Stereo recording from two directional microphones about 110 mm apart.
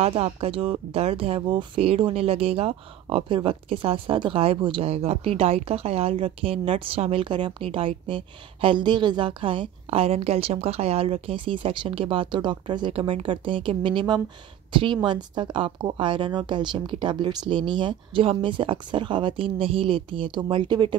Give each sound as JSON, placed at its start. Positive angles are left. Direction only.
{"t": 0.0, "sound": "speech", "side_deg": -60}
{"t": 4.8, "sound": "speech", "side_deg": -65}